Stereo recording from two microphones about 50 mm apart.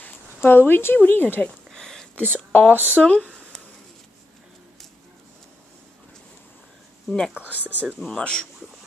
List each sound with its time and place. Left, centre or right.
0.0 s speech: left
1.7 s a sound: centre
2.2 s speech: right
3.0 s speech: left
7.1 s speech: centre
7.3 s speech: right
8.1 s speech: centre